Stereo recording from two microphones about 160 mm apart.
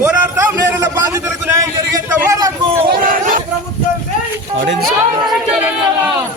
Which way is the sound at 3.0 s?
60° right (ahead or behind).